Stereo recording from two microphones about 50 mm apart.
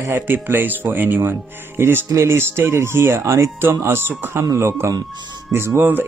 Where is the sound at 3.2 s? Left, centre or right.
Right.